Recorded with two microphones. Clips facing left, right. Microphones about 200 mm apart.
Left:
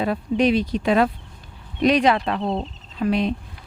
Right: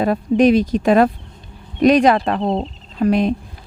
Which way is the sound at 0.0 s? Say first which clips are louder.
Right 6 dB; 45° right (ahead or behind).